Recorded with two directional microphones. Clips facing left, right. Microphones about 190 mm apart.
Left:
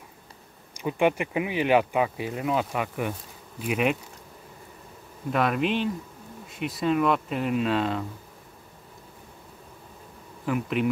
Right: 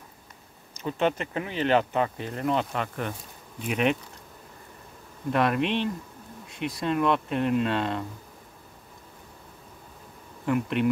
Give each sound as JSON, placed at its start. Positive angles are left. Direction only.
{"t": 0.7, "sound": "speech", "side_deg": 10}
{"t": 5.3, "sound": "speech", "side_deg": 0}
{"t": 10.4, "sound": "speech", "side_deg": 0}